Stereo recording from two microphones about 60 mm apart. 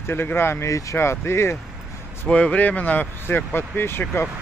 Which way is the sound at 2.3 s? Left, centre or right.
Left.